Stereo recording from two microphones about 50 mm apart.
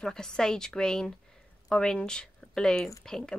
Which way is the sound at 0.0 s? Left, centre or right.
Centre.